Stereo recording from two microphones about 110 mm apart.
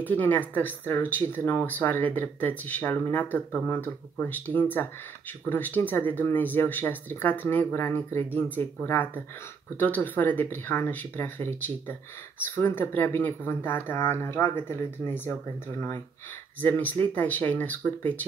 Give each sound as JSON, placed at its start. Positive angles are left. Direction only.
{"t": 0.0, "sound": "speech", "side_deg": 15}
{"t": 16.6, "sound": "speech", "side_deg": 15}